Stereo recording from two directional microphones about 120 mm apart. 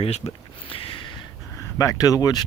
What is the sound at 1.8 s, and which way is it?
Speech, 30° left (ahead or behind).